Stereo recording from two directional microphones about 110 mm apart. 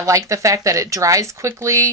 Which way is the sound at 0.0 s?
30° right (ahead or behind).